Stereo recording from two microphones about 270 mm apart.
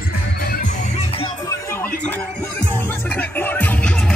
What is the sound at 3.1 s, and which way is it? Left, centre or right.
Music, centre.